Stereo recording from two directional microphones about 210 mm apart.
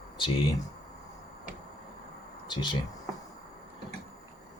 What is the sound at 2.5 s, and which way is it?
Speech, 20° left (ahead or behind).